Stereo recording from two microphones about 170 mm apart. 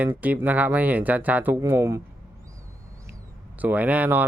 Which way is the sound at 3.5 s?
10° right (ahead or behind).